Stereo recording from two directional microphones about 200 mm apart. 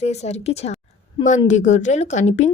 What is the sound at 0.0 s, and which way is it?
A woman's voice, 35° left (ahead or behind).